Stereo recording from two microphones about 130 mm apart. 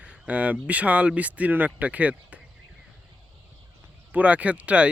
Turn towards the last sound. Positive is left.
turn(degrees=-10)  # may be behind; listen again after turning